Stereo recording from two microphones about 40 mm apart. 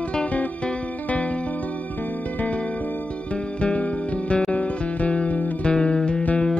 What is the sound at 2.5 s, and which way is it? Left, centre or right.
Music, left.